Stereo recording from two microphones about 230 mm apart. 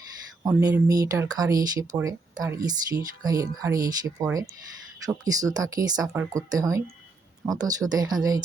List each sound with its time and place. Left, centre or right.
0.4 s speech: centre